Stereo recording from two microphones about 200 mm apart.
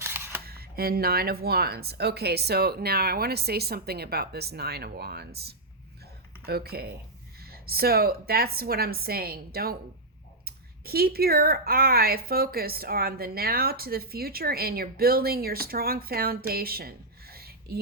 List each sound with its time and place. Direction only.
0.0 s camera: 10° right (ahead or behind)
0.4 s speech: 50° right (ahead or behind)